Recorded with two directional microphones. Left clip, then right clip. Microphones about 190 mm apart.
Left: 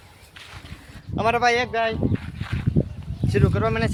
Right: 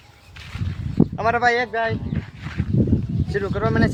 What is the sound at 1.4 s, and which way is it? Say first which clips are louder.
Speech: right 1 dB; centre (ahead or behind).